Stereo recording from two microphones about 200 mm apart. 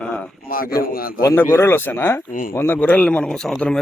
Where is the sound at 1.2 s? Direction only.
15° left (ahead or behind).